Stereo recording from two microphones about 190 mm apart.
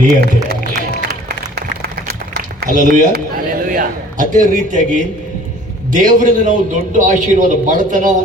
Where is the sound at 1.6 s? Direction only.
55° right (ahead or behind).